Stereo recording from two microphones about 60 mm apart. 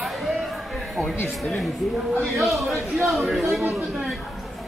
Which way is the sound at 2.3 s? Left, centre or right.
Centre.